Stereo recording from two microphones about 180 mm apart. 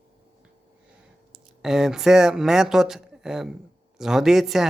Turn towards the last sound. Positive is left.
turn(degrees=0)  # may be behind; listen again after turning